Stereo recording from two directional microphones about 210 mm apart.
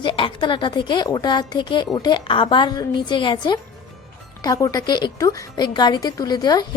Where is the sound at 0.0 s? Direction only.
25° left (ahead or behind).